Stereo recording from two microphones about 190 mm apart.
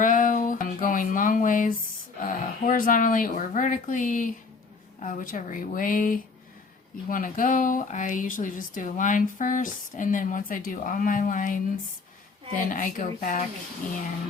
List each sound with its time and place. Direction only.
0.0 s a sound: 45° left (ahead or behind)
2.4 s speech: 45° left (ahead or behind)
12.5 s speech: 45° left (ahead or behind)